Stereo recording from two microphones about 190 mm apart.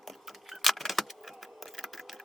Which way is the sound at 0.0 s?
Centre (ahead or behind).